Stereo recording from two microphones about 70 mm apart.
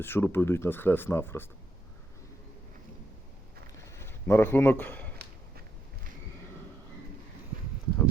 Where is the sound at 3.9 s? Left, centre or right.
Left.